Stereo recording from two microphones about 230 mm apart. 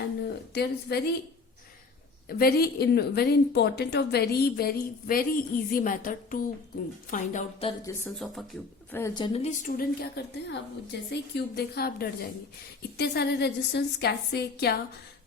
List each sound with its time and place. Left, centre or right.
0.2 s a sound: left
2.2 s a woman's voice: left
7.9 s a woman's voice: centre; by 14.8 s left